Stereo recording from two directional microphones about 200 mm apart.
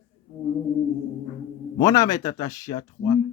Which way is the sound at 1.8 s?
20° left (ahead or behind).